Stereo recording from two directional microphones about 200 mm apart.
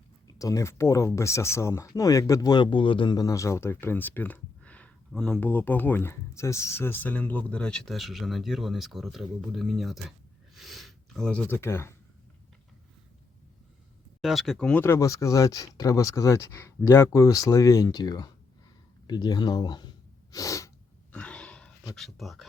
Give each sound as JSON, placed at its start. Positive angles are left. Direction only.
{"t": 0.3, "sound": "speech", "side_deg": 15}
{"t": 14.2, "sound": "speech", "side_deg": 0}
{"t": 20.3, "sound": "sneeze", "side_deg": 15}
{"t": 21.1, "sound": "a sound", "side_deg": 5}
{"t": 21.9, "sound": "speech", "side_deg": 0}